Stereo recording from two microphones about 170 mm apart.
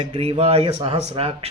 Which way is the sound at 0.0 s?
35° right (ahead or behind).